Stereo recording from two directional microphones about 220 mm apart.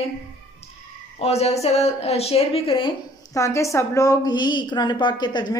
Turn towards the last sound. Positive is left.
turn(degrees=20)  # may be behind; listen again after turning